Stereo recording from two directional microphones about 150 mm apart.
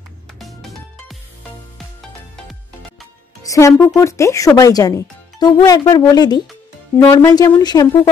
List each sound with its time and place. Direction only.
0.4 s music: centre (ahead or behind)
3.4 s speech: 20° left (ahead or behind)
7.0 s speech: 15° left (ahead or behind)